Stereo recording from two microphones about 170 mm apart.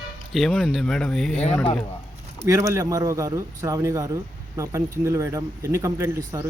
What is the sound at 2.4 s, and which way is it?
Speech, 15° right (ahead or behind).